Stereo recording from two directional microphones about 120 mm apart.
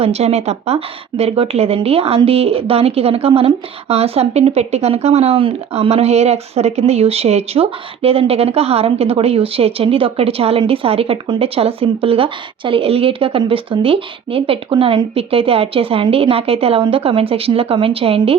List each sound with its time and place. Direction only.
0.0 s a woman's voice: 60° right (ahead or behind)